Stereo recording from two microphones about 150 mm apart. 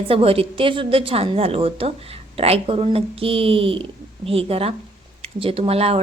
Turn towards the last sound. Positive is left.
turn(degrees=-40)  # may be behind; listen again after turning